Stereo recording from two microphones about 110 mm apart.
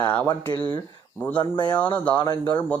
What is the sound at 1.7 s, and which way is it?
Speech, 10° left (ahead or behind).